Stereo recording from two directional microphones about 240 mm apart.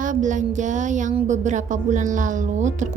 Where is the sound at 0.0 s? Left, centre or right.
Right.